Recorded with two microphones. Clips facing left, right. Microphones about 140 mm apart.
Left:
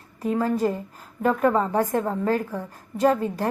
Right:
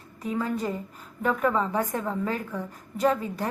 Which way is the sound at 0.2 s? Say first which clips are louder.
Left 6 dB; 40° left (ahead or behind).